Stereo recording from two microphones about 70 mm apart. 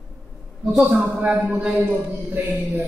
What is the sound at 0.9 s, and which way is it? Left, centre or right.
Speech, centre.